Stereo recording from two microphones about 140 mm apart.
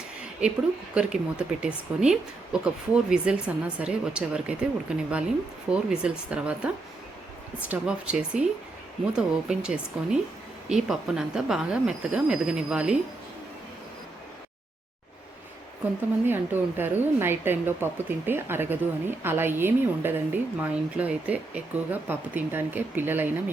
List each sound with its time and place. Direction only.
0.4 s a woman's voice: 5° right (ahead or behind)
7.7 s a woman's voice: 5° right (ahead or behind)
16.2 s a woman's voice: 15° right (ahead or behind)